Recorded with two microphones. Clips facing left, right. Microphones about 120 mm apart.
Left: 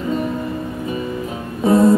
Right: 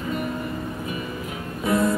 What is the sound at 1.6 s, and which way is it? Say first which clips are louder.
Music: left 9 dB; 30° left (ahead or behind).